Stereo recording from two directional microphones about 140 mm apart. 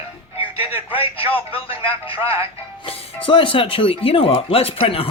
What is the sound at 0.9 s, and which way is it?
Speech, 40° left (ahead or behind).